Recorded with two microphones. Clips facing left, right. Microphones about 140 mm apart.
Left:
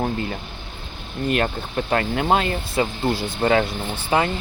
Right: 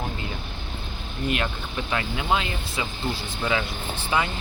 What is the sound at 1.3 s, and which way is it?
Speech, 45° left (ahead or behind).